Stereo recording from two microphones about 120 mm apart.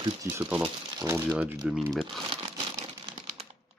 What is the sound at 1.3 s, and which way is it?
Speech, 10° right (ahead or behind).